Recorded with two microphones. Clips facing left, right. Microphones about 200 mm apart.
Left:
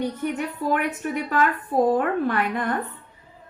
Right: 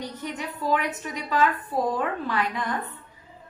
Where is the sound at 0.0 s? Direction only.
55° left (ahead or behind).